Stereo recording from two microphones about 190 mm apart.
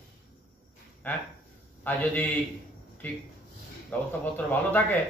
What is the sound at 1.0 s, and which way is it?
Speech, 10° left (ahead or behind).